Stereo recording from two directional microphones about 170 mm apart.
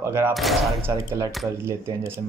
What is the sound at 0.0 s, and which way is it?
Speech, 15° right (ahead or behind).